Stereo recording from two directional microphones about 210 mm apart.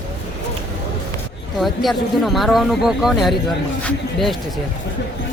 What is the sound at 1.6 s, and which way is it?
Speech, centre (ahead or behind).